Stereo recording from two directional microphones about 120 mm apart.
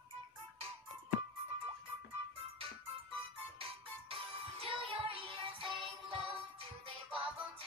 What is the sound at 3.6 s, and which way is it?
Music, 50° right (ahead or behind).